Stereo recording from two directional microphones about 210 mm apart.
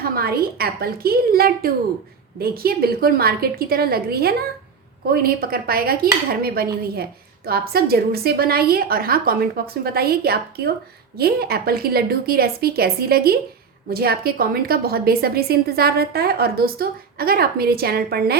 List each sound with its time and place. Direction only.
0.0 s speech: 45° right (ahead or behind)